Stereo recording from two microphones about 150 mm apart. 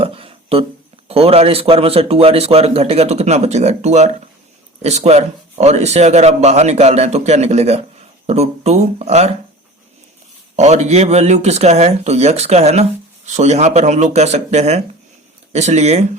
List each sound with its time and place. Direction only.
0.0 s a sound: 40° right (ahead or behind)
1.0 s a man's voice: 40° right (ahead or behind)
10.6 s speech: 45° right (ahead or behind)